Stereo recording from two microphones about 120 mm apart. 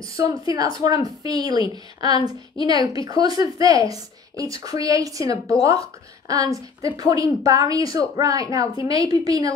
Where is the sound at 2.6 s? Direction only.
30° right (ahead or behind).